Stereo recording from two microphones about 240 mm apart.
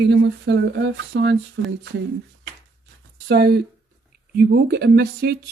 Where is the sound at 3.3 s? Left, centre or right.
Right.